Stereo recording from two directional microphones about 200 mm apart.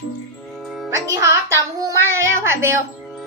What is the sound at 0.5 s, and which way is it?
Music, centre (ahead or behind).